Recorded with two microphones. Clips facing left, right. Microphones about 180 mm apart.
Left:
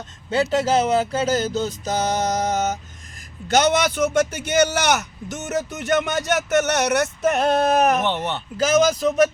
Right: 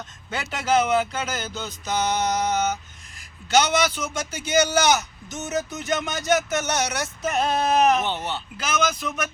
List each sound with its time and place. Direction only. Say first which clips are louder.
0.3 s speech: left 6 dB; 35° left (ahead or behind); by 8.4 s 60° left (ahead or behind)
8.5 s speech: left 9 dB; 40° left (ahead or behind)